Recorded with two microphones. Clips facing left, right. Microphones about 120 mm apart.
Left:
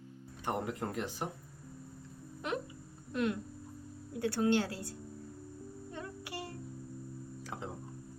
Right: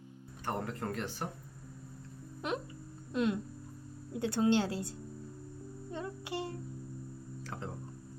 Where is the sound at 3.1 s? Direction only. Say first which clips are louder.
Right 2 dB; 20° right (ahead or behind).